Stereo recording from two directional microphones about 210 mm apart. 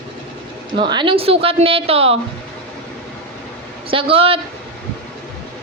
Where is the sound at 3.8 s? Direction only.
25° right (ahead or behind).